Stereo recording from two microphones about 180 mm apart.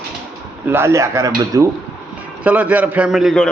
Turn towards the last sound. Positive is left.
turn(degrees=0)  # may be behind; listen again after turning